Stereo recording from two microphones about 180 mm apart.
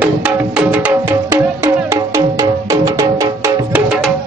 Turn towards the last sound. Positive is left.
turn(degrees=-15)  # may be behind; listen again after turning